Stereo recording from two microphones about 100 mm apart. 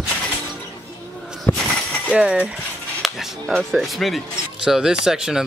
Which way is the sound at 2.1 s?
10° right (ahead or behind).